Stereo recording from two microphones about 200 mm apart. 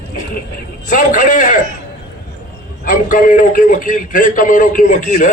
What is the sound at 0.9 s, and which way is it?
Speech, 40° left (ahead or behind).